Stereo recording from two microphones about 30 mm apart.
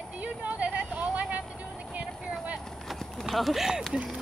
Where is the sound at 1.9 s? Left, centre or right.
Right.